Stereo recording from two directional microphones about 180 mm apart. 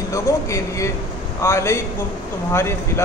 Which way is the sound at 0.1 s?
15° left (ahead or behind).